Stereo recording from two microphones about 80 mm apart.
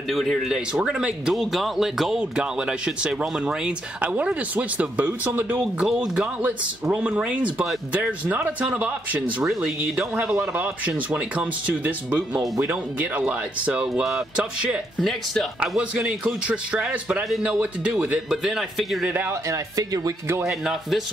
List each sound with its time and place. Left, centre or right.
0.1 s speech: centre; by 5.6 s right
5.6 s a man's voice: centre
9.4 s a man's voice: centre
15.0 s speech: centre
15.6 s speech: centre
19.0 s a man's voice: right
19.5 s speech: right
20.4 s speech: centre